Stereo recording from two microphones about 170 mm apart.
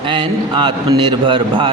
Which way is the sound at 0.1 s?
30° right (ahead or behind).